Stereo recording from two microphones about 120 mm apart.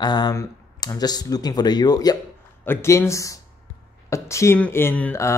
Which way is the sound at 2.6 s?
20° left (ahead or behind).